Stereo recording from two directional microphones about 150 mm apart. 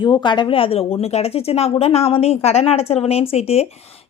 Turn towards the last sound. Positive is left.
turn(degrees=45)  # may be behind; listen again after turning